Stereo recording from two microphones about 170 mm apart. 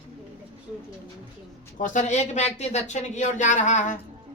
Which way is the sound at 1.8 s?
45° left (ahead or behind).